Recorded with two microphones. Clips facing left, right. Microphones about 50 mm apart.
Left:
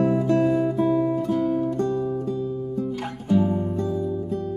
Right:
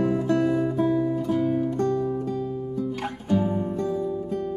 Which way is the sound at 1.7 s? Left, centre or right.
Right.